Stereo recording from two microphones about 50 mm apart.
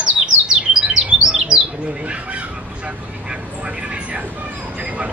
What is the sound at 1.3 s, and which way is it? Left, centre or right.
Bird, centre.